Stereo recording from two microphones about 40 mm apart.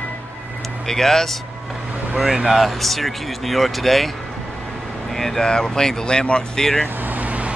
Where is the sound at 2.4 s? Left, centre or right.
Centre.